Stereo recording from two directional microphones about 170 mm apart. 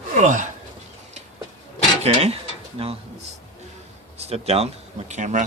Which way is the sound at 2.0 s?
40° right (ahead or behind).